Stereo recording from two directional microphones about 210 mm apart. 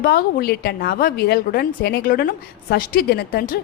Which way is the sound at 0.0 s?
45° left (ahead or behind).